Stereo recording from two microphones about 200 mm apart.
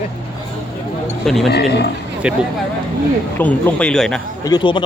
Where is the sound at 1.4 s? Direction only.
55° left (ahead or behind).